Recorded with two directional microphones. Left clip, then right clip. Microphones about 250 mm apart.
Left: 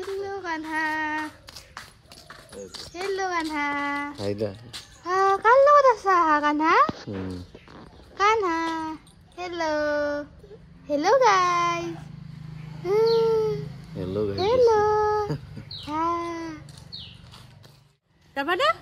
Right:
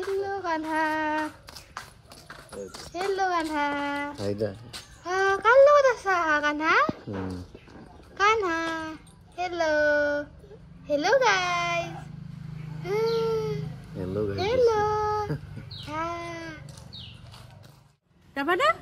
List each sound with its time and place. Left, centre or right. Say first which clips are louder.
0.0 s a child's voice: right 2 dB; centre
8.2 s a child's voice: left 2 dB; centre
13.1 s a sound: left 5 dB; centre
18.3 s speech: left 1 dB; centre